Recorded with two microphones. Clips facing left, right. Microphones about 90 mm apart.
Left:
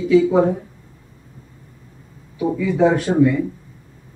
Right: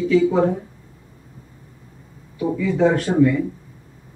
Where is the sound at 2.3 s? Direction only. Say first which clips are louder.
Left 1 dB; 15° left (ahead or behind).